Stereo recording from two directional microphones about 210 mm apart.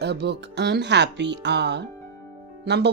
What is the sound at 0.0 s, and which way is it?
Speech, 55° right (ahead or behind).